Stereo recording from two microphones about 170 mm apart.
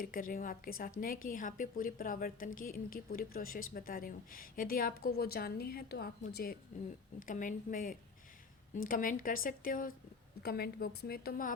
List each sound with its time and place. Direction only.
0.0 s a woman's voice: 55° left (ahead or behind)
7.2 s a woman's voice: 50° left (ahead or behind)
10.4 s a woman's voice: 65° left (ahead or behind)